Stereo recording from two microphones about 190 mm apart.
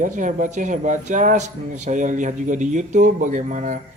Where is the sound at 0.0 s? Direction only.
40° right (ahead or behind).